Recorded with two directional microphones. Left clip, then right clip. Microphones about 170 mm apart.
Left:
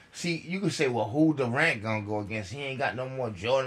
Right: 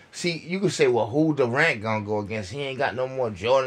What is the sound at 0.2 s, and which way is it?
Speech, 50° right (ahead or behind).